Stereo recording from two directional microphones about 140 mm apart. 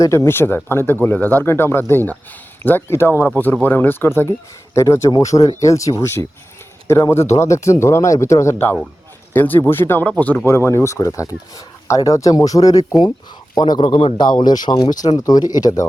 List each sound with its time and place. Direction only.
0.3 s a man's voice: 15° left (ahead or behind)